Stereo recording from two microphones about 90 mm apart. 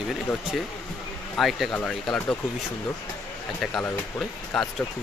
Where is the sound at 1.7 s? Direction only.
15° left (ahead or behind).